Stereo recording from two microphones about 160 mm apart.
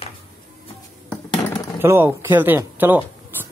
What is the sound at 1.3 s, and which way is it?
Typewriter, 25° left (ahead or behind).